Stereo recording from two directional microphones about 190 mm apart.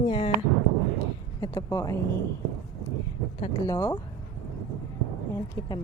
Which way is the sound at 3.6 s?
15° left (ahead or behind).